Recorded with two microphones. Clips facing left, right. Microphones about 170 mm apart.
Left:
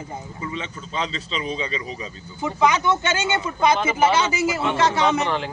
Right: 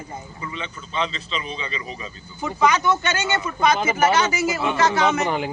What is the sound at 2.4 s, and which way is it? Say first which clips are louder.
Speech: even; 20° left (ahead or behind).